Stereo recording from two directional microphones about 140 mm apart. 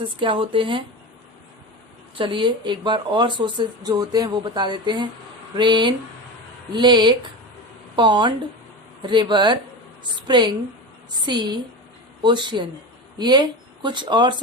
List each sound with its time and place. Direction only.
0.2 s speech: 40° right (ahead or behind)
2.1 s speech: 35° right (ahead or behind)